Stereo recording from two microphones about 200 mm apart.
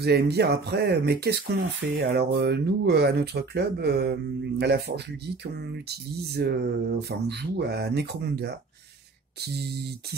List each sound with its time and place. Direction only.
0.0 s speech: 55° right (ahead or behind)